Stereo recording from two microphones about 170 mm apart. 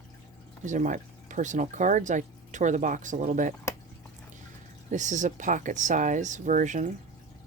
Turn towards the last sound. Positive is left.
turn(degrees=-45)  # may be behind; listen again after turning